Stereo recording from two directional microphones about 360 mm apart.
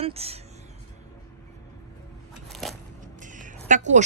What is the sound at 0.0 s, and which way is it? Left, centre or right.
Speech, centre.